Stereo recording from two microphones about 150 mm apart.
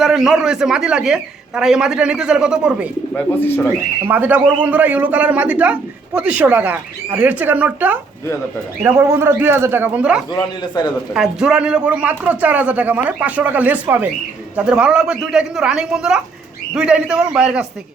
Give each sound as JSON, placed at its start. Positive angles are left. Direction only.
{"t": 0.0, "sound": "speech", "side_deg": 0}
{"t": 3.2, "sound": "speech", "side_deg": 15}
{"t": 4.0, "sound": "a man's voice", "side_deg": -10}
{"t": 10.3, "sound": "a man's voice", "side_deg": 30}
{"t": 11.1, "sound": "a man's voice", "side_deg": -5}